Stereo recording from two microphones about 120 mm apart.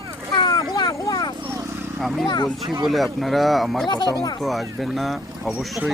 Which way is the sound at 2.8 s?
Centre (ahead or behind).